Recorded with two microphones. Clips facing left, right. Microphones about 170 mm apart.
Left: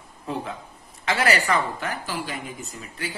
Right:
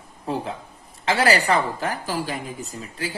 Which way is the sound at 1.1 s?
30° right (ahead or behind).